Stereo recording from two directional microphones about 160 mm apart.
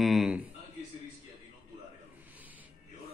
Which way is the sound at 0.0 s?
Centre (ahead or behind).